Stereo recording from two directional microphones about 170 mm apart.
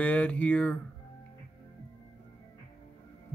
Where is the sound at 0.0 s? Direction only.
10° left (ahead or behind).